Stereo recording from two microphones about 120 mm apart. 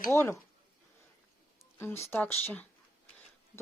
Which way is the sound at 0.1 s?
20° left (ahead or behind).